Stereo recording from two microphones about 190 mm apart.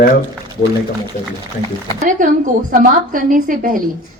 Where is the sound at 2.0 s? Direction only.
40° right (ahead or behind).